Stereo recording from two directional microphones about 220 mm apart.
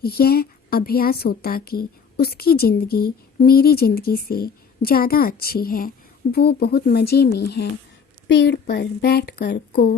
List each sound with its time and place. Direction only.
0.0 s a woman's voice: 45° left (ahead or behind)